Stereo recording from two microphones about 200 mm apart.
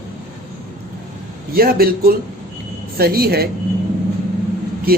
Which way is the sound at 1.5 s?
50° right (ahead or behind).